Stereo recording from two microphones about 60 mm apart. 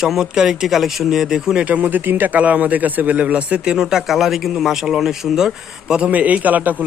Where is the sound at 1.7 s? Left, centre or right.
Right.